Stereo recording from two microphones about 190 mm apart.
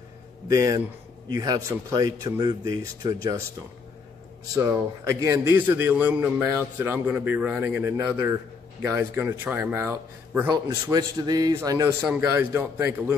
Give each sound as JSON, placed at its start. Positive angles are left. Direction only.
{"t": 0.5, "sound": "speech", "side_deg": -20}
{"t": 4.6, "sound": "a man's voice", "side_deg": -15}